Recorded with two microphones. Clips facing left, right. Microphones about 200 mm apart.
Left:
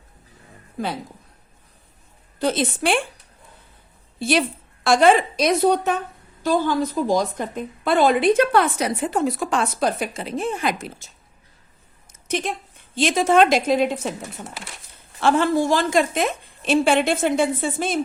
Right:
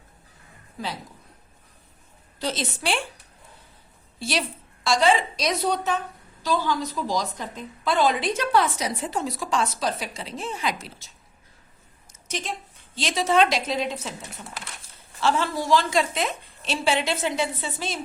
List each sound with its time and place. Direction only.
2.4 s a woman's voice: 55° left (ahead or behind)
4.2 s a woman's voice: 55° left (ahead or behind)
12.3 s a woman's voice: 55° left (ahead or behind)
15.2 s a woman's voice: 55° left (ahead or behind)